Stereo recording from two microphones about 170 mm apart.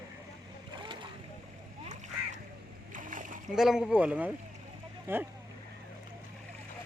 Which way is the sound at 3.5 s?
5° right (ahead or behind).